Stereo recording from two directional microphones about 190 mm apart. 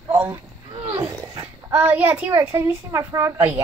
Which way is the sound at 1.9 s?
10° right (ahead or behind).